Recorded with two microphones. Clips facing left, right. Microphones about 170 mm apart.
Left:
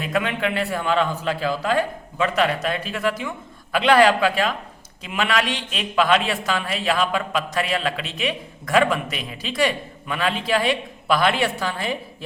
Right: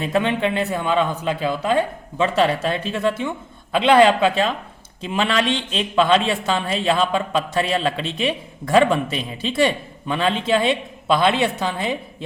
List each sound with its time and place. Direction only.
0.0 s a man's voice: 25° right (ahead or behind)